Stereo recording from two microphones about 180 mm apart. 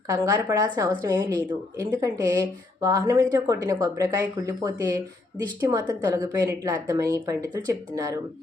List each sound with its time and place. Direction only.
0.1 s a woman's voice: 20° right (ahead or behind)